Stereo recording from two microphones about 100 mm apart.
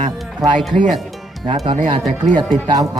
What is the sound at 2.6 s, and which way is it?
Speech, 40° right (ahead or behind).